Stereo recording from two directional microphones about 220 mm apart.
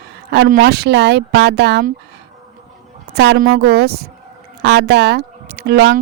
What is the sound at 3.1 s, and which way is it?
Speech, 50° right (ahead or behind).